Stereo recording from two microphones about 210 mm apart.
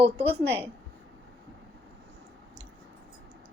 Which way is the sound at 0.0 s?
25° right (ahead or behind).